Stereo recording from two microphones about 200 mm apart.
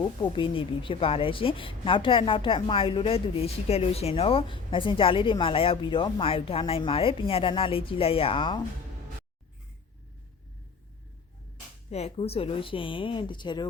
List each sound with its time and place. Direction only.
0.0 s a woman's voice: 25° left (ahead or behind)
11.9 s a woman's voice: 30° left (ahead or behind)